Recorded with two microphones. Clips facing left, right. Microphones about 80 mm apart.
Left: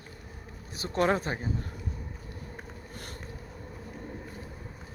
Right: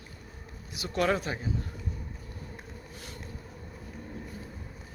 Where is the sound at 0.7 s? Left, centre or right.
Left.